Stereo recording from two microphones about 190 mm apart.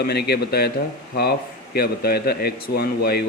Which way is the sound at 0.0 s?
60° left (ahead or behind).